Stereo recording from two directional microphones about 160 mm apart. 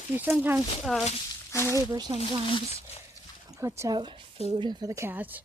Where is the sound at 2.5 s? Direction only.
35° left (ahead or behind).